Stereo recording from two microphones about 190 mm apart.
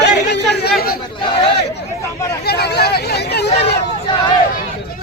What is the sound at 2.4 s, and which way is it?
Speech, 60° left (ahead or behind).